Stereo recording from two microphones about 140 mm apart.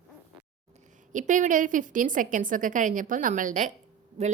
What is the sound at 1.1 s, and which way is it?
A woman's voice, 65° right (ahead or behind).